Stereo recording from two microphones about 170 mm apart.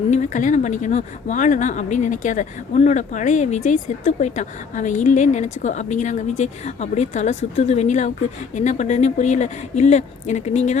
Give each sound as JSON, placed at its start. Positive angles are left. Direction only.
{"t": 0.1, "sound": "speech", "side_deg": 45}